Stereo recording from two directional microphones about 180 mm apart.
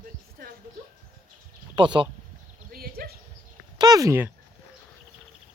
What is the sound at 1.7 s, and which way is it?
Speech, 25° right (ahead or behind).